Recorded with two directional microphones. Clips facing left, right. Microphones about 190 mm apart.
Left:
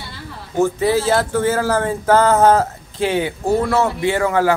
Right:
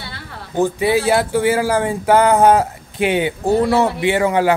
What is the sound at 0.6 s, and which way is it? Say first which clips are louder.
A man's voice: even; 15° right (ahead or behind).